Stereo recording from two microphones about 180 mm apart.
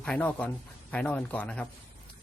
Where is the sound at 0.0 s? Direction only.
5° left (ahead or behind).